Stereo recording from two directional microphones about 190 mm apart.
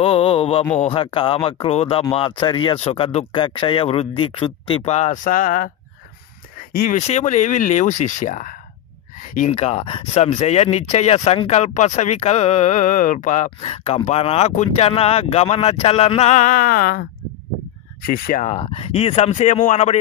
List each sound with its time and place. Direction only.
0.0 s speech: 30° left (ahead or behind)
6.7 s speech: 50° left (ahead or behind)
7.0 s speech: 35° left (ahead or behind)
18.0 s speech: 50° left (ahead or behind)